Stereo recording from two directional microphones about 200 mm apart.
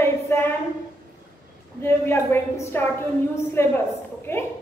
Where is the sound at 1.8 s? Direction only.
10° left (ahead or behind).